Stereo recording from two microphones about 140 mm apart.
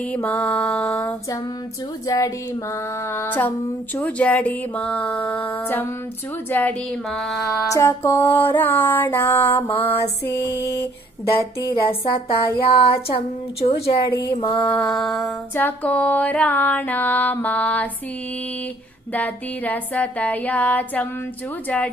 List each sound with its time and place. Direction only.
0.0 s female singing: 10° left (ahead or behind)
2.0 s female singing: 25° left (ahead or behind)
6.5 s music: 10° left (ahead or behind)
7.7 s female singing: 20° left (ahead or behind)
9.8 s music: 15° left (ahead or behind)
11.7 s a sound: 40° left (ahead or behind)
14.8 s music: 5° left (ahead or behind)
15.5 s female singing: 10° left (ahead or behind)
19.1 s female singing: 10° left (ahead or behind)